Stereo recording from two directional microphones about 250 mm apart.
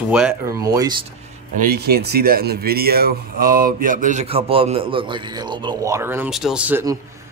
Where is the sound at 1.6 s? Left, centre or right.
Right.